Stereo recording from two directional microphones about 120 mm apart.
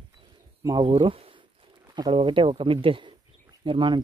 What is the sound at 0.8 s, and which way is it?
Speech, 45° right (ahead or behind).